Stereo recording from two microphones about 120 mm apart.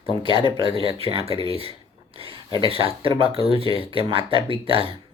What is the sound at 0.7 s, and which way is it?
Speech, 50° right (ahead or behind).